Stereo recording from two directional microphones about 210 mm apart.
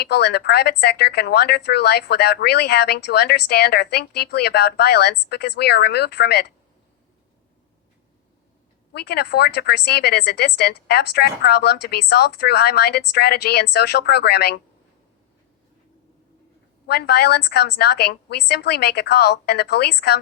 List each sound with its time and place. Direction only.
0.0 s speech: 50° left (ahead or behind)
8.9 s speech: 50° left (ahead or behind)
16.8 s speech: 50° left (ahead or behind)